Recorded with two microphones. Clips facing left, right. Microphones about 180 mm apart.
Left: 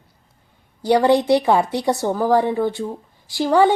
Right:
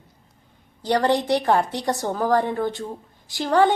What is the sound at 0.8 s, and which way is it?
A woman's voice, 10° left (ahead or behind).